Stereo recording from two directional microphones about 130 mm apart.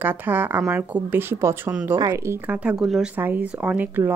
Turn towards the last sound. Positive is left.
turn(degrees=-15)  # may be behind; listen again after turning